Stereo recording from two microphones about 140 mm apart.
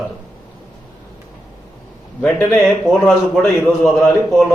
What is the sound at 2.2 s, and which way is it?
A man's voice, 15° left (ahead or behind).